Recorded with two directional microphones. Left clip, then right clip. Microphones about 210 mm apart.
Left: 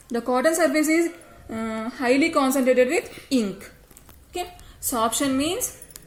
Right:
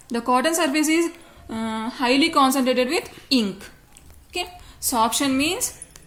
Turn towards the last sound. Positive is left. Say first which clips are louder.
# right 2 dB
turn(degrees=-20)  # may be behind; listen again after turning